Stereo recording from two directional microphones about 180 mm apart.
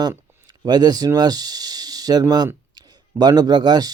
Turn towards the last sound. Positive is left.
turn(degrees=-20)  # may be behind; listen again after turning